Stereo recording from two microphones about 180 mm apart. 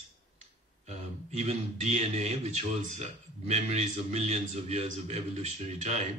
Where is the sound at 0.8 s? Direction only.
35° right (ahead or behind).